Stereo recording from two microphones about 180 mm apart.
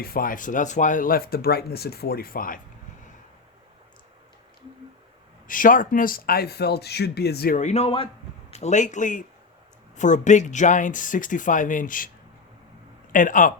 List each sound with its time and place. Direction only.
0.0 s speech: 55° left (ahead or behind)
5.5 s speech: 50° left (ahead or behind)
7.6 s a man's voice: 35° left (ahead or behind)
13.1 s speech: 45° left (ahead or behind)